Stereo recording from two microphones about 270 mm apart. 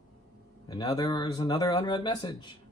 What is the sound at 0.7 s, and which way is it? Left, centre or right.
Speech, centre.